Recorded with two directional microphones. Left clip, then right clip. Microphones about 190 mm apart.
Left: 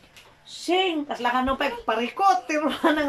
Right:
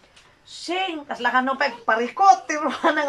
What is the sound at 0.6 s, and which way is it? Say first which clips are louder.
Speech: left 3 dB; 20° left (ahead or behind).